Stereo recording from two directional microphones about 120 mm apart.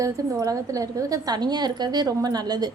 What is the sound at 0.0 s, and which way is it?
A woman's voice, 30° right (ahead or behind).